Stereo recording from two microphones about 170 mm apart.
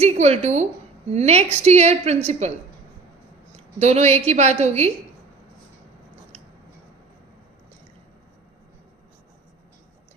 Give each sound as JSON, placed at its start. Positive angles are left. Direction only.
{"t": 0.0, "sound": "a woman's voice", "side_deg": -40}
{"t": 3.5, "sound": "a woman's voice", "side_deg": -40}